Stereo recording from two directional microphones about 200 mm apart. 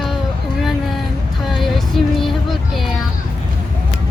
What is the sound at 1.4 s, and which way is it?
Music, centre (ahead or behind).